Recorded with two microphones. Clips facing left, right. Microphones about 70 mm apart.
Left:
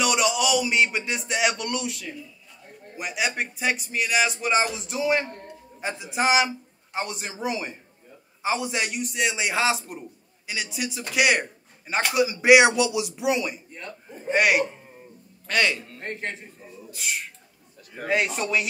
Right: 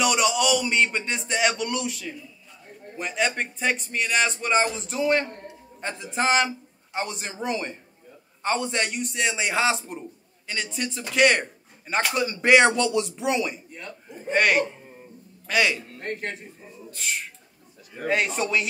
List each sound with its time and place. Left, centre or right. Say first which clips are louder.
0.0 s a man's voice: right 1 dB; centre
15.4 s a man's voice: right 1 dB; centre
16.0 s speech: right 1 dB; left
16.9 s a man's voice: even; centre